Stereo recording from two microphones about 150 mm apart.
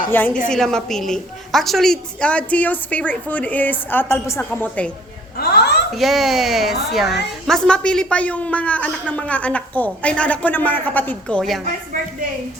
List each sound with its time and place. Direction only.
0.1 s a woman's voice: 10° left (ahead or behind)
5.4 s a sound: 90° left
5.9 s a woman's voice: centre (ahead or behind)